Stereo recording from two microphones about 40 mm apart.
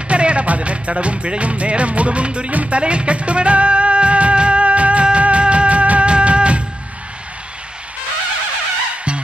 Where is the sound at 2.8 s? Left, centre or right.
Right.